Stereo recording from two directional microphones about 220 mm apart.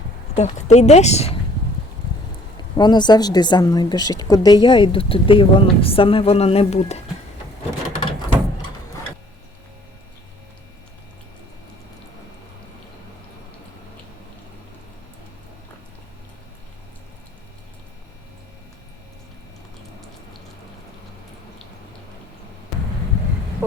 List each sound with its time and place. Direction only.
0.3 s speech: 30° left (ahead or behind)
2.7 s a woman's voice: 20° left (ahead or behind)